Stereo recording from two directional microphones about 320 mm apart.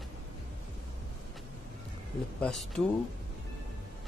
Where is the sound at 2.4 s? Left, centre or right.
Centre.